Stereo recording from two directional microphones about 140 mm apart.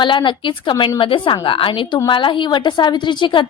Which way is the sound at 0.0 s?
35° left (ahead or behind).